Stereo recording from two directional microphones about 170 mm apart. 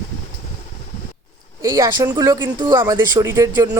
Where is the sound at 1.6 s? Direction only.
20° right (ahead or behind).